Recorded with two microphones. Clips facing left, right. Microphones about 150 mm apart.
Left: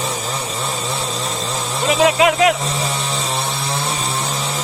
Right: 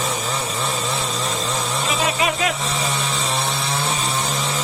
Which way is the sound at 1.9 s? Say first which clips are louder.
Left 9 dB; 85° left.